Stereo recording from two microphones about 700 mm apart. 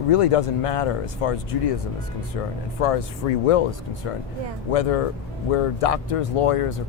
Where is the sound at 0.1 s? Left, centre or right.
Left.